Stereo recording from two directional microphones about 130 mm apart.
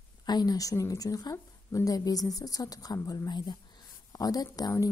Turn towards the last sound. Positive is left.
turn(degrees=30)  # may be behind; listen again after turning